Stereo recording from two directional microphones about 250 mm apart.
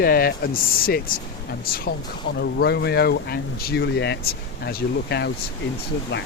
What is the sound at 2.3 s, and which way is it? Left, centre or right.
Speech, left.